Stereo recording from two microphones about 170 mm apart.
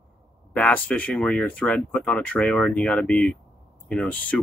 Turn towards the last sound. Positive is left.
turn(degrees=10)  # may be behind; listen again after turning